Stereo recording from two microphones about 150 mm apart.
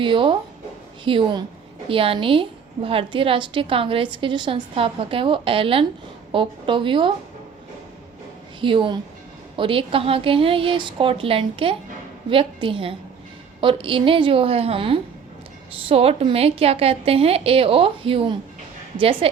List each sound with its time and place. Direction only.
0.0 s a woman's voice: 35° right (ahead or behind)
8.6 s a woman's voice: 35° right (ahead or behind)